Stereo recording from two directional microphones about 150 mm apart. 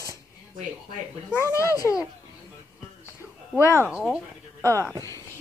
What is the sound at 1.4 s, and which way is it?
Speech, 20° left (ahead or behind).